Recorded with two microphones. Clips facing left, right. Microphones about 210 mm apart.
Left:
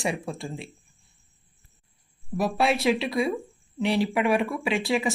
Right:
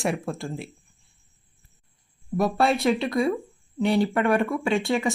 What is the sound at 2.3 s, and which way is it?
Speech, centre (ahead or behind).